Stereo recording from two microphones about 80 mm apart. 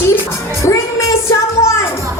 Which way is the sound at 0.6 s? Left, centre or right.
Left.